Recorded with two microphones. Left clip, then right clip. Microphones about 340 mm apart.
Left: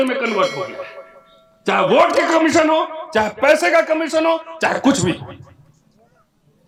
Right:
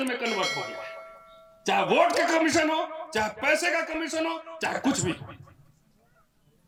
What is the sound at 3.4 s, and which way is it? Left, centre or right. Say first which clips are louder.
A man's voice: left 12 dB; centre.